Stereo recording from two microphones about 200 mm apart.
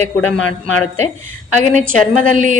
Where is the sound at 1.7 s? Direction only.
40° right (ahead or behind).